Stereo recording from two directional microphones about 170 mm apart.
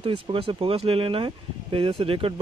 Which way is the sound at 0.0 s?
30° right (ahead or behind).